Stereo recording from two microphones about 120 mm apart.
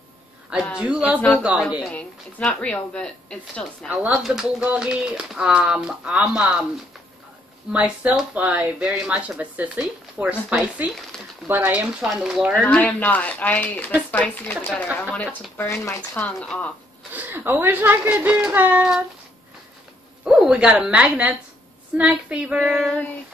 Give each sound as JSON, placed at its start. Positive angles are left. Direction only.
{"t": 0.7, "sound": "speech", "side_deg": -5}
{"t": 1.9, "sound": "a woman's voice", "side_deg": 10}
{"t": 4.0, "sound": "speech", "side_deg": -10}
{"t": 7.7, "sound": "speech", "side_deg": -10}
{"t": 12.6, "sound": "a woman's voice", "side_deg": 15}
{"t": 15.0, "sound": "speech", "side_deg": 5}
{"t": 15.6, "sound": "speech", "side_deg": 25}
{"t": 16.2, "sound": "a woman's voice", "side_deg": 10}
{"t": 17.1, "sound": "speech", "side_deg": -15}
{"t": 20.2, "sound": "speech", "side_deg": -10}
{"t": 22.6, "sound": "speech", "side_deg": 0}